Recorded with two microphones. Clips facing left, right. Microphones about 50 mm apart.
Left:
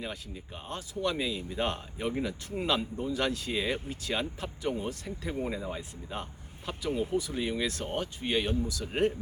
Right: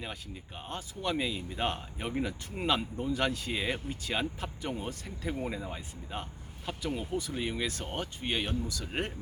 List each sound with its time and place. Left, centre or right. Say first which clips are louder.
0.7 s speech: left 2 dB; centre